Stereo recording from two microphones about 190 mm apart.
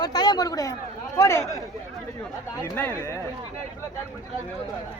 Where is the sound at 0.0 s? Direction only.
20° left (ahead or behind).